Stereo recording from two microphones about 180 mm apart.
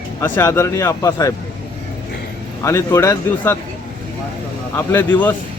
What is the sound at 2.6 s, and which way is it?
Speech, 15° left (ahead or behind).